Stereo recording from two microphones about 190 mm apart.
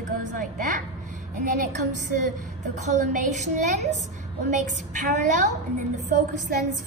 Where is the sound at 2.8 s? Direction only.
40° right (ahead or behind).